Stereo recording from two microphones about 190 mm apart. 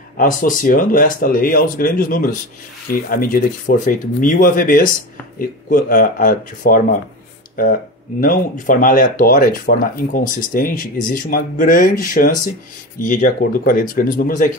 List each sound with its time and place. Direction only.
0.2 s speech: 45° left (ahead or behind)